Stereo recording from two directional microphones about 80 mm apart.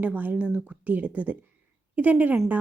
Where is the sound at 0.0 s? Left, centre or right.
Right.